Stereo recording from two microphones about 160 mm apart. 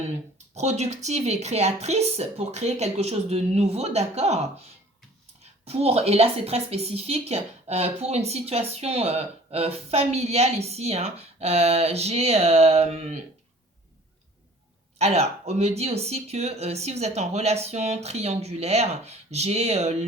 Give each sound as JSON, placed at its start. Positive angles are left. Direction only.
{"t": 0.5, "sound": "a woman's voice", "side_deg": -45}
{"t": 14.9, "sound": "a woman's voice", "side_deg": -40}